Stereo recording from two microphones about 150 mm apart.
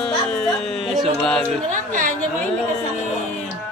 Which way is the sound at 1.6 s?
60° right (ahead or behind).